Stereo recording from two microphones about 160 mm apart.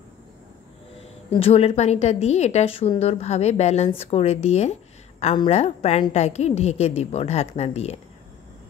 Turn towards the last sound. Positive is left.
turn(degrees=40)  # may be behind; listen again after turning